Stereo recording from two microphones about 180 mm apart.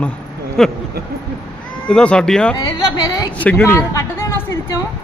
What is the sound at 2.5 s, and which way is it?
Speech, 20° left (ahead or behind).